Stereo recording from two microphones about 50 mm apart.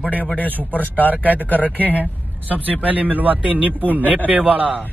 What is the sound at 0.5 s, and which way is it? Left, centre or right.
Speech, right.